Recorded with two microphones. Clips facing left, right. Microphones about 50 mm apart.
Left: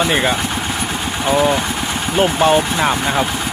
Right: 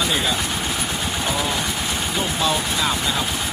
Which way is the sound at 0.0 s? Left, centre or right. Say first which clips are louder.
Left 6 dB; left.